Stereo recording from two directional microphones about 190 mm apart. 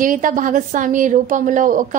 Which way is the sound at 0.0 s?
45° right (ahead or behind).